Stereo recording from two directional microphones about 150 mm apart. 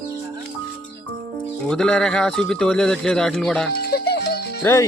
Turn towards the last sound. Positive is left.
turn(degrees=20)  # may be behind; listen again after turning